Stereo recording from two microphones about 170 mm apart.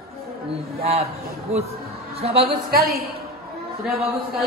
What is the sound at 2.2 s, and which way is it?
Speech, 35° right (ahead or behind).